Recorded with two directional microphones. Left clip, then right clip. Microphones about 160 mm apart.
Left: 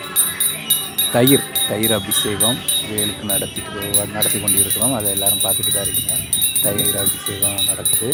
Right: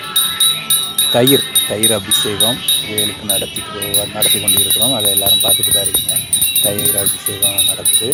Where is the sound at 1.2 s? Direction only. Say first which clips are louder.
Right 1 dB; 20° right (ahead or behind).